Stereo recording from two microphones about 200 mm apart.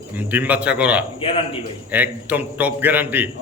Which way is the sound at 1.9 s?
10° right (ahead or behind).